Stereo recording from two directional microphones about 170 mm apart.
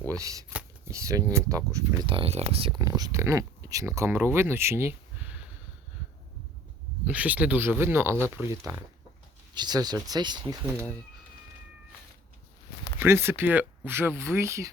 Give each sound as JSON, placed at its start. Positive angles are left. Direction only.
{"t": 0.2, "sound": "speech", "side_deg": -20}
{"t": 2.0, "sound": "speech", "side_deg": -35}
{"t": 2.8, "sound": "speech", "side_deg": -20}
{"t": 7.1, "sound": "speech", "side_deg": -10}
{"t": 13.0, "sound": "speech", "side_deg": -15}